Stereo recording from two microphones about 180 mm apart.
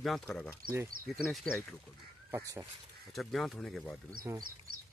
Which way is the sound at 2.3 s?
15° right (ahead or behind).